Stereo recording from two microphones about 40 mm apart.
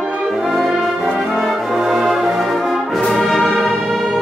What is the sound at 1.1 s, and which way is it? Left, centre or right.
Brass instrument, centre.